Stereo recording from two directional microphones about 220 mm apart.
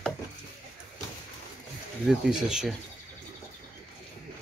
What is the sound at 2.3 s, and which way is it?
Speech, 5° right (ahead or behind).